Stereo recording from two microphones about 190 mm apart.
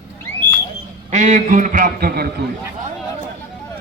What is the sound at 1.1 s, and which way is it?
A man's voice, 40° right (ahead or behind).